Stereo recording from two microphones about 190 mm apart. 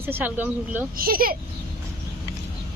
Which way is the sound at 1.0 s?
50° right (ahead or behind).